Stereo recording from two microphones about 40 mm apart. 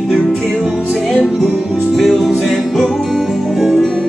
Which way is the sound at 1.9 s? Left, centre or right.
Centre.